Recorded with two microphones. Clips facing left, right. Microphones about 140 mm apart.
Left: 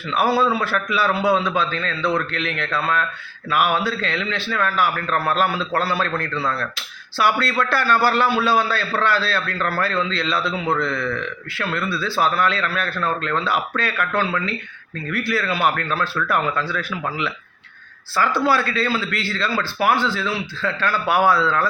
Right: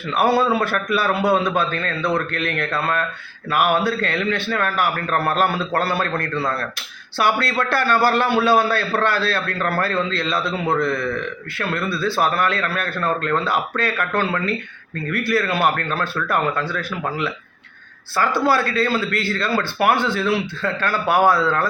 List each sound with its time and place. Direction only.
0.5 s a man's voice: 55° right (ahead or behind)
18.4 s a man's voice: 45° right (ahead or behind)